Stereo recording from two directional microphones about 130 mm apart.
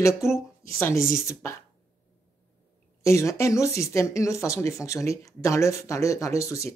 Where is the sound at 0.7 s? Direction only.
20° left (ahead or behind).